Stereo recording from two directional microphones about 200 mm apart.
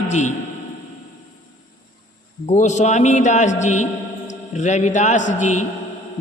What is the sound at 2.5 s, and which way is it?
A man's voice, 35° left (ahead or behind).